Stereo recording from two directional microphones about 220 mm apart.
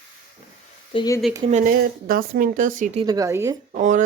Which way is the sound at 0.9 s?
20° left (ahead or behind).